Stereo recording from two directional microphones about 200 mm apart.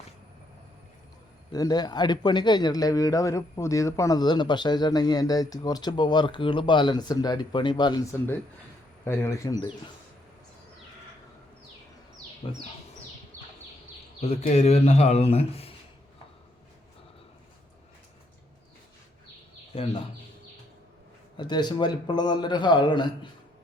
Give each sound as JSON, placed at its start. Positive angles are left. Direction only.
{"t": 1.5, "sound": "speech", "side_deg": 20}
{"t": 9.0, "sound": "speech", "side_deg": 15}
{"t": 12.4, "sound": "speech", "side_deg": 25}
{"t": 14.2, "sound": "speech", "side_deg": 35}
{"t": 19.7, "sound": "speech", "side_deg": 30}
{"t": 21.3, "sound": "speech", "side_deg": 20}